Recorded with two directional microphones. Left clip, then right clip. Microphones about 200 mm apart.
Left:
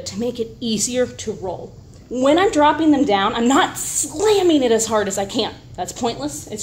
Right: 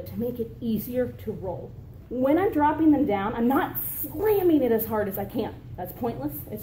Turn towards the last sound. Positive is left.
turn(degrees=30)  # may be behind; listen again after turning